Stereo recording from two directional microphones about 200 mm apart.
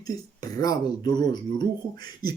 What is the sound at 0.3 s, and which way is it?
Speech, 20° left (ahead or behind).